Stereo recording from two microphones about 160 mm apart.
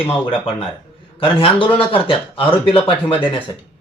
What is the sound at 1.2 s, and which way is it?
Speech, 35° left (ahead or behind).